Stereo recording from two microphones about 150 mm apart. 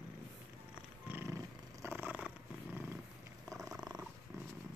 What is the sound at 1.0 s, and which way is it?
Purr, 15° right (ahead or behind).